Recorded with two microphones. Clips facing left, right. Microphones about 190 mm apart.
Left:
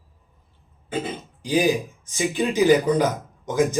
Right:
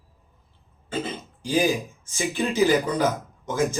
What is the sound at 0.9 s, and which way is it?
Throat clearing, 15° left (ahead or behind).